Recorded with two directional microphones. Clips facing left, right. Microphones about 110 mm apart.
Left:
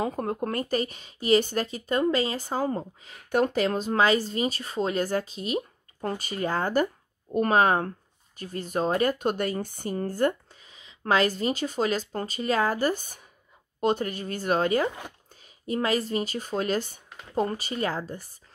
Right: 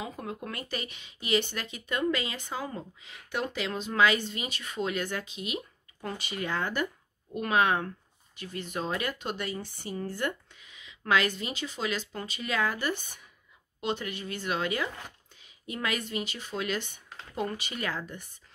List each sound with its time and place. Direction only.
0.0 s a woman's voice: 45° left (ahead or behind)